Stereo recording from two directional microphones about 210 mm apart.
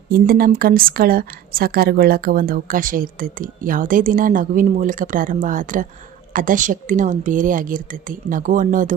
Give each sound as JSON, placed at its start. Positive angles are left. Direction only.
{"t": 0.1, "sound": "a woman's voice", "side_deg": -45}